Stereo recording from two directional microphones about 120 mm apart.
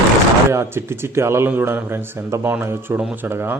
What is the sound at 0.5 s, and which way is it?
A man's voice, 20° right (ahead or behind).